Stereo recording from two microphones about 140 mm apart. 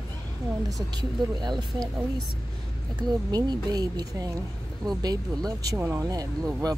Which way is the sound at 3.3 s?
30° right (ahead or behind).